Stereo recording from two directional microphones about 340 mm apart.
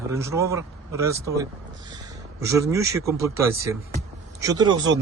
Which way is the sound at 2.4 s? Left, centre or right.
Centre.